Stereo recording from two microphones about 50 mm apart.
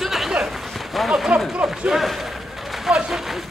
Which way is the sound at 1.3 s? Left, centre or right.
Right.